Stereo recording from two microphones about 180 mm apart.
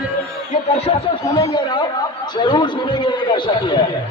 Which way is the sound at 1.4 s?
25° left (ahead or behind).